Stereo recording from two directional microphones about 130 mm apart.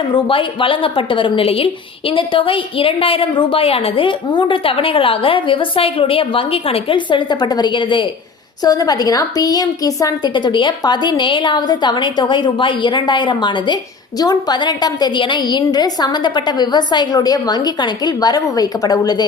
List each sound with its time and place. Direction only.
0.1 s a woman's voice: 40° left (ahead or behind)
8.6 s a woman's voice: 30° left (ahead or behind)